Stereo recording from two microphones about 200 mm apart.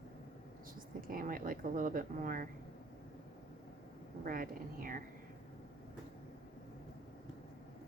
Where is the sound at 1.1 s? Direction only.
45° right (ahead or behind).